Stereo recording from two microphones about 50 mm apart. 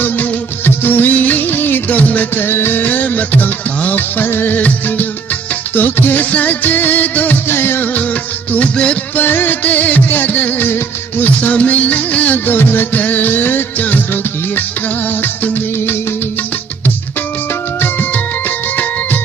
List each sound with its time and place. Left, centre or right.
0.0 s music of bollywood: left
2.8 s music: left
7.4 s music: left
8.5 s music: left
9.1 s music: left
15.2 s music: left
18.1 s music: left